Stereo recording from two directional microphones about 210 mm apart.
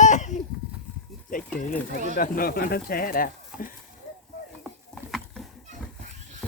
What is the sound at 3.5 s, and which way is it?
Speech, 5° right (ahead or behind).